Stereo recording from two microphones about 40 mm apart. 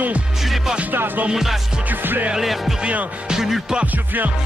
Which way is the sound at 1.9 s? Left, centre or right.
Right.